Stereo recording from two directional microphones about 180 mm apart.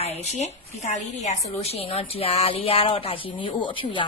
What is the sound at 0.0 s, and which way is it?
A woman's voice, 35° left (ahead or behind).